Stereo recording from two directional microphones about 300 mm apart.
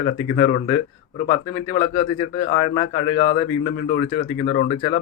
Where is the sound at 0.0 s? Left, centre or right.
Centre.